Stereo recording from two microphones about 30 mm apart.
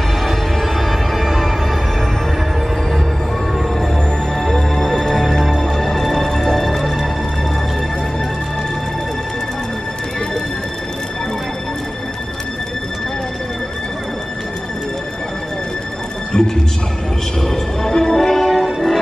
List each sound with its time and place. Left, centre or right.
0.2 s music: centre
4.4 s music: centre
16.3 s music: left
18.4 s music: centre